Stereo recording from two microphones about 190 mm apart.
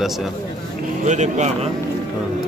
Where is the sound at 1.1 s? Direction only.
40° right (ahead or behind).